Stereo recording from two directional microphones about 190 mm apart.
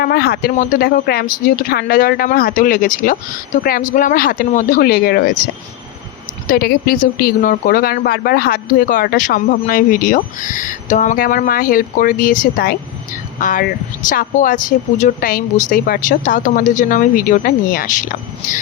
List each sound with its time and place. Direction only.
0.0 s speech: 55° left (ahead or behind)
6.5 s speech: 50° left (ahead or behind)